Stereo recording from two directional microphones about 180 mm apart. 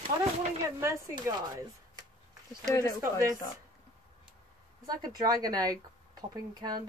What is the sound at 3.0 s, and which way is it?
Speech, 15° right (ahead or behind).